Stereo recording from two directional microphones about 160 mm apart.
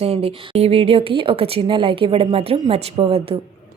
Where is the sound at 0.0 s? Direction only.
40° right (ahead or behind).